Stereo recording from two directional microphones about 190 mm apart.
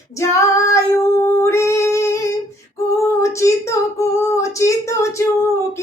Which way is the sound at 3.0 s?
15° left (ahead or behind).